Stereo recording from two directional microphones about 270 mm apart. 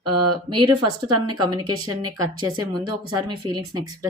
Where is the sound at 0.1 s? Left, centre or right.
Centre.